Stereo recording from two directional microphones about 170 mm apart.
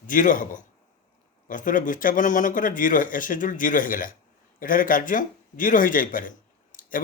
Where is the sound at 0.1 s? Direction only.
50° left (ahead or behind).